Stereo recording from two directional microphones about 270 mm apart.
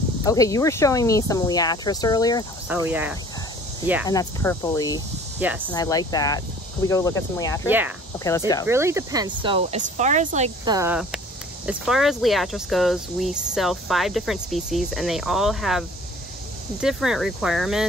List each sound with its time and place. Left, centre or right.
0.2 s speech: centre
2.7 s speech: centre
4.1 s speech: centre
7.6 s speech: centre
8.2 s speech: centre
8.6 s speech: centre
16.8 s speech: centre